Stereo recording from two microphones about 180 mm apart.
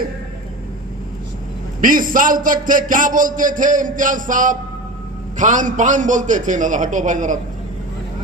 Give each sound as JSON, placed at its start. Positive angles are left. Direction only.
{"t": 1.8, "sound": "a man's voice", "side_deg": -50}